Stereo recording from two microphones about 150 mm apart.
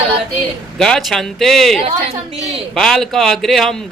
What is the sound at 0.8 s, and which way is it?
Speech, centre (ahead or behind).